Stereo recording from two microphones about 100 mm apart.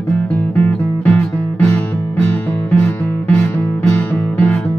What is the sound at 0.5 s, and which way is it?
Music, 15° left (ahead or behind).